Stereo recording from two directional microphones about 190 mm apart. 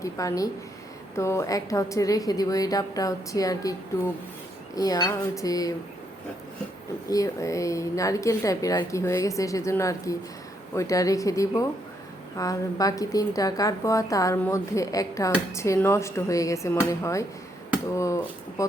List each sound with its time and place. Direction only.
0.0 s a woman's voice: 15° left (ahead or behind)
7.1 s a woman's voice: 15° left (ahead or behind)